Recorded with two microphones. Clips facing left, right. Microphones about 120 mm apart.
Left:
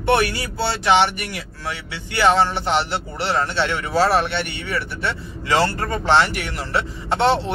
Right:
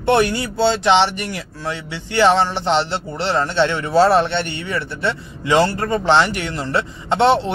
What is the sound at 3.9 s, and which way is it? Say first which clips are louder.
A man's voice: right 4 dB; 25° right (ahead or behind).